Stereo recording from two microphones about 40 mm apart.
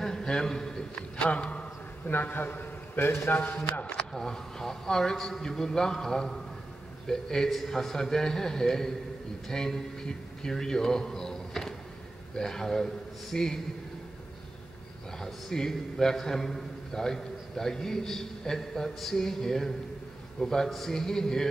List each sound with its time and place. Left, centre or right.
0.0 s speech: centre
1.2 s a man's voice: left
2.3 s a man's voice: left
3.0 s a man's voice: left
4.1 s a man's voice: centre
15.1 s a man's voice: centre